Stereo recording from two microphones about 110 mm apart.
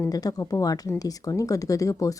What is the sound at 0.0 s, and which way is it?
Speech, 35° left (ahead or behind).